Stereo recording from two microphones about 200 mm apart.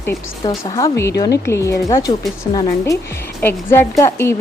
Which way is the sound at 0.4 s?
20° left (ahead or behind).